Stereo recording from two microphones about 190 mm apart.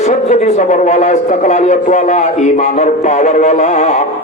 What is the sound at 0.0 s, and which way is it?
A man's voice, 40° left (ahead or behind).